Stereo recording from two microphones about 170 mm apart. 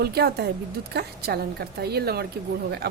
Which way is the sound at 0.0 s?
70° right (ahead or behind).